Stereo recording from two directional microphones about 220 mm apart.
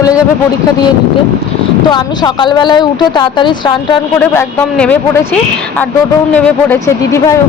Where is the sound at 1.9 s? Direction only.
20° left (ahead or behind).